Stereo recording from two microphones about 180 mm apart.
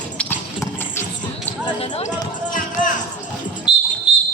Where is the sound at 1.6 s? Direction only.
35° left (ahead or behind).